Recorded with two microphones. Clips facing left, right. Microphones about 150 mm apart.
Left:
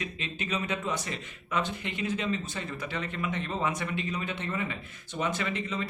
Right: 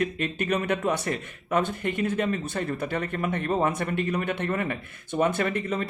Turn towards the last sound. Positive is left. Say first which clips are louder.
# right 6 dB
turn(degrees=-55)  # may be behind; listen again after turning